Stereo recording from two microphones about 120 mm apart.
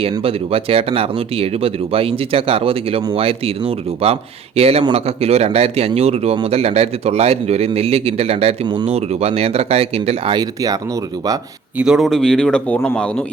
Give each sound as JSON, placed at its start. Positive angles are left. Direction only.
{"t": 0.2, "sound": "a man's voice", "side_deg": -50}
{"t": 8.6, "sound": "speech", "side_deg": -40}
{"t": 8.9, "sound": "a man's voice", "side_deg": -60}
{"t": 10.3, "sound": "speech", "side_deg": -30}
{"t": 11.8, "sound": "speech", "side_deg": -5}